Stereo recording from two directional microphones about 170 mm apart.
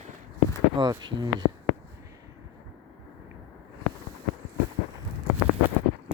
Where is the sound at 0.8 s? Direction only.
25° right (ahead or behind).